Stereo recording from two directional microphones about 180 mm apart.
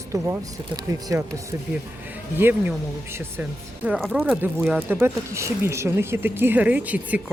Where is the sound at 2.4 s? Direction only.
10° right (ahead or behind).